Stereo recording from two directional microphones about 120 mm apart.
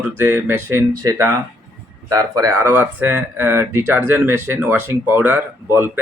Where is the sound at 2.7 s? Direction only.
15° right (ahead or behind).